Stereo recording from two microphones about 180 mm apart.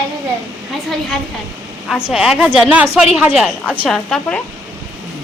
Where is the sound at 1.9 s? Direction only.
5° right (ahead or behind).